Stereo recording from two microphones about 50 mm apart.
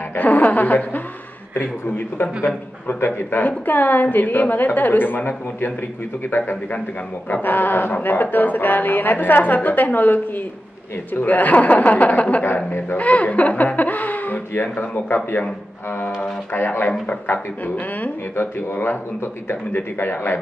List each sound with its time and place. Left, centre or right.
0.1 s a woman's voice: left
7.4 s speech: left
16.5 s speech: left
18.3 s speech: left